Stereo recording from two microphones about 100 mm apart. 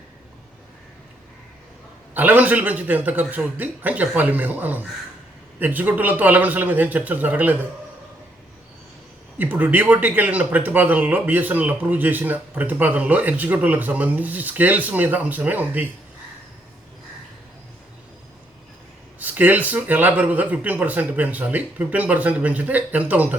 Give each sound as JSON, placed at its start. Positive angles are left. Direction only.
{"t": 2.1, "sound": "a man's voice", "side_deg": -15}
{"t": 9.4, "sound": "a man's voice", "side_deg": -20}
{"t": 19.2, "sound": "a man's voice", "side_deg": -15}